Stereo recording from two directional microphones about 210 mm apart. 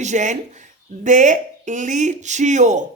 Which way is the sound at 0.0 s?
35° right (ahead or behind).